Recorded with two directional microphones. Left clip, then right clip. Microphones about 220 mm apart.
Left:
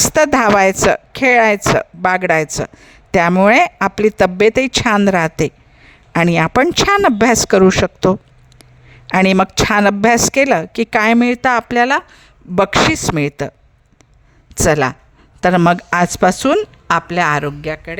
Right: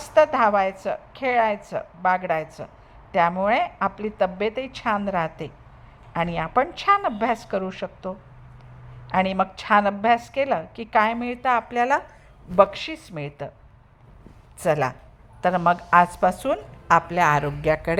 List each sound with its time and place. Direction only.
0.0 s speech: 60° left (ahead or behind)
11.9 s speech: 35° left (ahead or behind)
12.5 s speech: 55° left (ahead or behind)
14.6 s speech: 60° left (ahead or behind)
16.9 s speech: 35° left (ahead or behind)